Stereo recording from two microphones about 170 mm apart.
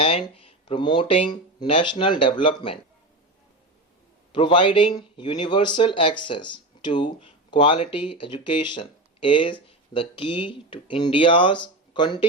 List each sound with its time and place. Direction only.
0.0 s speech: 30° left (ahead or behind)
4.3 s speech: 30° left (ahead or behind)